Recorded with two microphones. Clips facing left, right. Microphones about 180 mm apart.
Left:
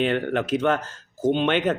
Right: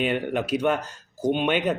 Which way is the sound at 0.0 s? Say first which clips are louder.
Left 2 dB; 15° right (ahead or behind).